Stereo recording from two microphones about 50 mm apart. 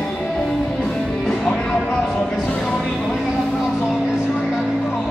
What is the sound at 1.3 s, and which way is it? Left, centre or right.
Music, centre.